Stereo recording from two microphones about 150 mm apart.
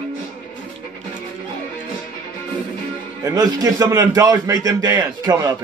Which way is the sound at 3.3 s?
25° right (ahead or behind).